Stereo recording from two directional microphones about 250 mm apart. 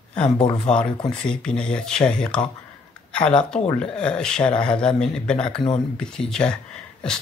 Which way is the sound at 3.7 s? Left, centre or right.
Centre.